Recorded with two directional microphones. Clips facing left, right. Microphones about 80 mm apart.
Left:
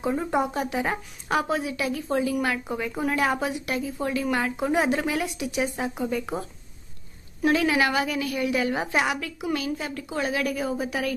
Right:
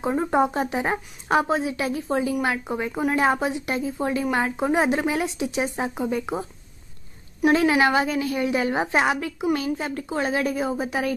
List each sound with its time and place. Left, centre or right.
0.0 s speech: right
7.4 s speech: right